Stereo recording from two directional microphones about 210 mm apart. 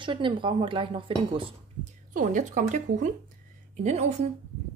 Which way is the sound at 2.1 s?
35° right (ahead or behind).